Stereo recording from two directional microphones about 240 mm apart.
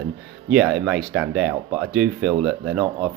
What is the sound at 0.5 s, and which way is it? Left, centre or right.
Speech, centre.